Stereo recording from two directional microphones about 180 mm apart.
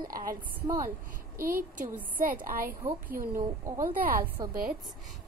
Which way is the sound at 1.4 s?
50° right (ahead or behind).